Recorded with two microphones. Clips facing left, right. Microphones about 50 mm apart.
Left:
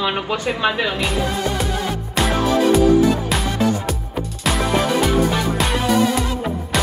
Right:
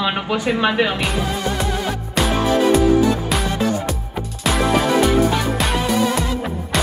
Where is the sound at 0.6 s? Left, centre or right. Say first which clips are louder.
Right 1 dB; right.